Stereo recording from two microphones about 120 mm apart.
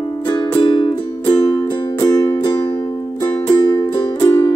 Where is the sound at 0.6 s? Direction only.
45° left (ahead or behind).